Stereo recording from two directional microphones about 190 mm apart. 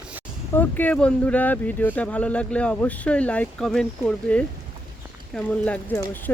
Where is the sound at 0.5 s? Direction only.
10° left (ahead or behind).